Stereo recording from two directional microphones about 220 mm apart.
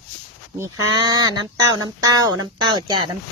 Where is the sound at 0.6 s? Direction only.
20° right (ahead or behind).